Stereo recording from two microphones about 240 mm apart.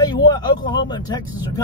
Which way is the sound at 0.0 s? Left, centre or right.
Centre.